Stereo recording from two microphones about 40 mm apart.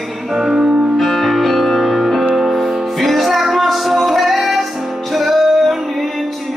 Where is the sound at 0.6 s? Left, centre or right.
Right.